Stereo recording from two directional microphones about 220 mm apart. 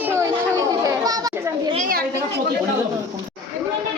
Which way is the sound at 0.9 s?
15° right (ahead or behind).